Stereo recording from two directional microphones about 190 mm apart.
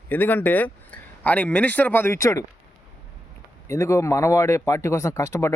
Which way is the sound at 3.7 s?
15° left (ahead or behind).